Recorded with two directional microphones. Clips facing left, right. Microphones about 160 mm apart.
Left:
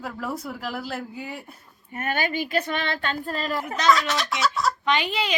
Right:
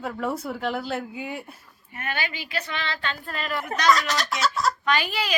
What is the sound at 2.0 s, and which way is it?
Speech, 45° left (ahead or behind).